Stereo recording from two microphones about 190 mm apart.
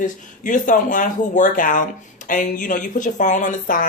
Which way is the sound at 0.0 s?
45° left (ahead or behind).